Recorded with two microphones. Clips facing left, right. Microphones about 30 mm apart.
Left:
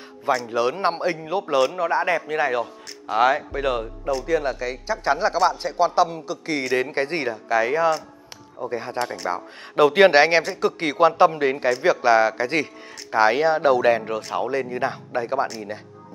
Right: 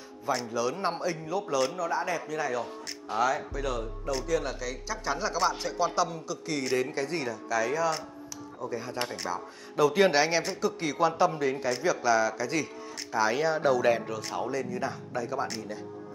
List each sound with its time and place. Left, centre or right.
0.5 s a man's voice: left